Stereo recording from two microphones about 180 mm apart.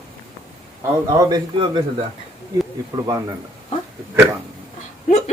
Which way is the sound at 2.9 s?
25° right (ahead or behind).